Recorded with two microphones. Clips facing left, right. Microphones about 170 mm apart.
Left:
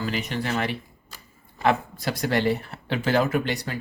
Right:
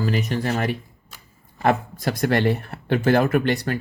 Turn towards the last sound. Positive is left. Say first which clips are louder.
# right 5 dB
turn(degrees=-60)  # may be behind; listen again after turning